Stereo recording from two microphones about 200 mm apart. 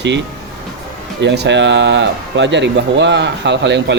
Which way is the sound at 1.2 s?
60° right (ahead or behind).